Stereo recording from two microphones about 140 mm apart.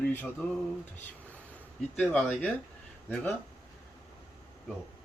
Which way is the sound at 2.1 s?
10° left (ahead or behind).